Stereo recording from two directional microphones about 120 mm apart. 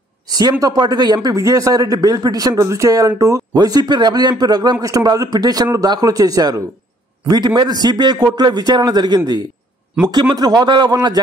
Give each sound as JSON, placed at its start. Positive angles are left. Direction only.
{"t": 0.3, "sound": "a man's voice", "side_deg": -30}